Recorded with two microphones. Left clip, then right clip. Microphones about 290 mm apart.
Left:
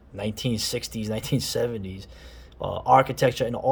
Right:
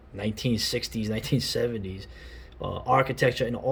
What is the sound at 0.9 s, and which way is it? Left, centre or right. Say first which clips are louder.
Speech: even; left.